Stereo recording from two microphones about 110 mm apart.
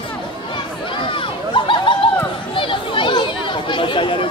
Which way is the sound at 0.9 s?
50° left (ahead or behind).